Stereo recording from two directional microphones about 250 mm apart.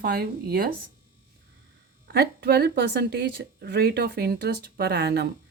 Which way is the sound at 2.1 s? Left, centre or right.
Right.